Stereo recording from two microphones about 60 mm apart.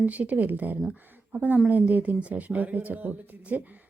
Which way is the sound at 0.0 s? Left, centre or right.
Right.